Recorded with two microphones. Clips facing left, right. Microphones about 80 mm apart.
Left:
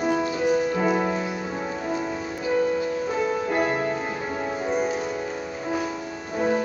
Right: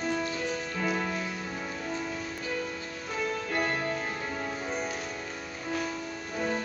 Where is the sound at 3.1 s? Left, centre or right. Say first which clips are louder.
Left 8 dB; centre.